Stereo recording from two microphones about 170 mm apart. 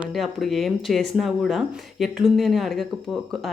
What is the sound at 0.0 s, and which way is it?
Speech, centre (ahead or behind).